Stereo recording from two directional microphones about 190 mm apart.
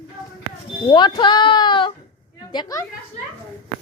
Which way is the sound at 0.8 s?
25° left (ahead or behind).